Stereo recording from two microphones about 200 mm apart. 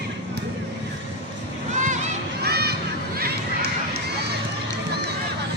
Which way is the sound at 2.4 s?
55° right (ahead or behind).